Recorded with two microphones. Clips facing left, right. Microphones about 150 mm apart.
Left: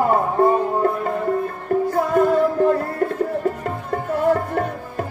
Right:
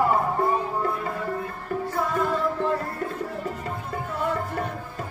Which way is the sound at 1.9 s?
50° left (ahead or behind).